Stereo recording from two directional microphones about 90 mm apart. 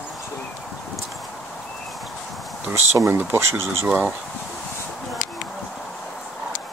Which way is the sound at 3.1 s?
25° right (ahead or behind).